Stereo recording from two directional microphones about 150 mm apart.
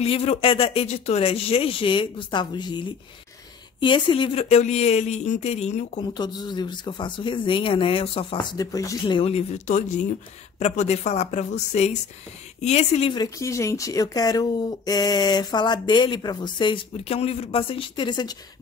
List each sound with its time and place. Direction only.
0.0 s speech: 40° left (ahead or behind)
6.1 s speech: 30° left (ahead or behind)
8.5 s speech: 20° left (ahead or behind); by 13.1 s 45° left (ahead or behind)
13.1 s speech: 25° left (ahead or behind)